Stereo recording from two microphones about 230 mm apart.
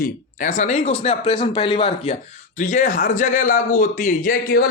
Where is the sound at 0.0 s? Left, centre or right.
Left.